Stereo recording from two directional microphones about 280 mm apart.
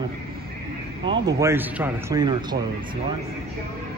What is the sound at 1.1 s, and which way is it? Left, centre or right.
Speech, centre.